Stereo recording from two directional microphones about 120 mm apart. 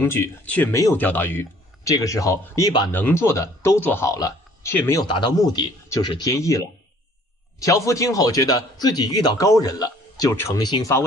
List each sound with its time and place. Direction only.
0.0 s speech: 20° left (ahead or behind)
2.0 s speech: 30° left (ahead or behind)
4.1 s a sound: 30° left (ahead or behind)
4.7 s speech: 20° left (ahead or behind)
5.0 s a man's voice: 40° left (ahead or behind)